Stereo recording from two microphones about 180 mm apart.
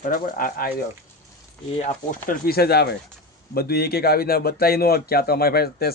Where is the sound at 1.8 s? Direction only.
45° left (ahead or behind).